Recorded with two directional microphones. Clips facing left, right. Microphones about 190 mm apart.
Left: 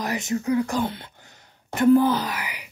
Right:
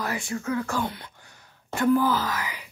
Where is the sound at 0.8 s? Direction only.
25° left (ahead or behind).